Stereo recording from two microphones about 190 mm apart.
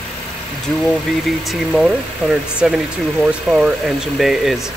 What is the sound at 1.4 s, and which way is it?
Speech, centre (ahead or behind).